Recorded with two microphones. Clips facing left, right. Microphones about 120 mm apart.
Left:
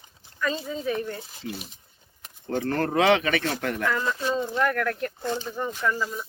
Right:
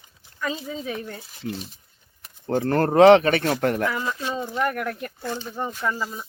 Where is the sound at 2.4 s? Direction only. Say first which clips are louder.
Right 5 dB; 40° right (ahead or behind).